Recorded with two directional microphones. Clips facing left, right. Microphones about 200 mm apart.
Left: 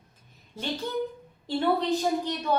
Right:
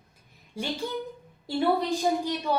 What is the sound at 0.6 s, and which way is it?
Speech, 10° right (ahead or behind).